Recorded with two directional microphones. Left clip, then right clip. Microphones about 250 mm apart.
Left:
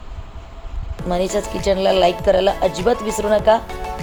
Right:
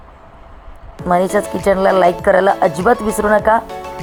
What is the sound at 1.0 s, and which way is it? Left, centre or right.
Speech, centre.